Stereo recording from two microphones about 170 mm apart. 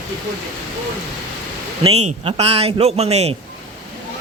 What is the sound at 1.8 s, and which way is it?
Speech, 40° right (ahead or behind).